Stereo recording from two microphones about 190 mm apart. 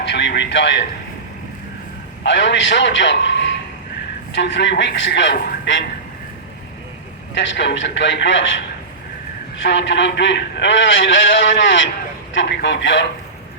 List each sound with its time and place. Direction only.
0.0 s music: 70° left (ahead or behind)
2.2 s a man's voice: 70° left (ahead or behind)
7.3 s a man's voice: 70° left (ahead or behind)
9.6 s a man's voice: 65° left (ahead or behind)